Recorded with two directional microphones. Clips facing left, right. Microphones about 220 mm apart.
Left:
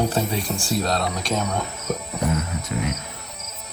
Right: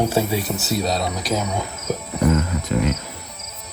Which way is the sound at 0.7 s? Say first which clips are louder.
Right 1 dB; centre (ahead or behind).